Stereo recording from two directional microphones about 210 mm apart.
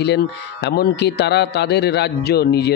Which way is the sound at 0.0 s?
55° left (ahead or behind).